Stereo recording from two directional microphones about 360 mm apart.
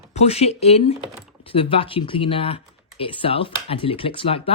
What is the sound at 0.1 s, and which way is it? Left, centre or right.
Speech, centre.